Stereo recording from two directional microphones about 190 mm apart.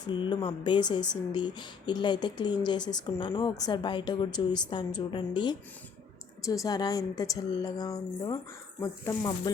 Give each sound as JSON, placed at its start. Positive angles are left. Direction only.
{"t": 0.0, "sound": "speech", "side_deg": 25}